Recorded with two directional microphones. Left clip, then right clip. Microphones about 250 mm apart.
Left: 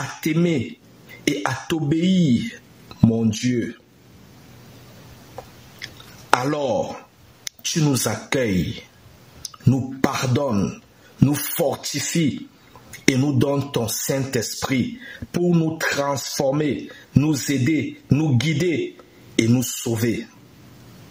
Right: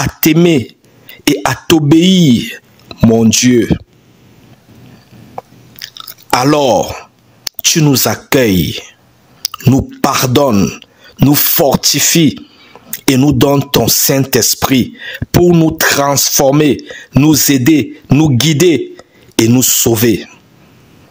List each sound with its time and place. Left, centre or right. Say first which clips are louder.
0.2 s speech: right 13 dB; right
6.3 s speech: right 10 dB; right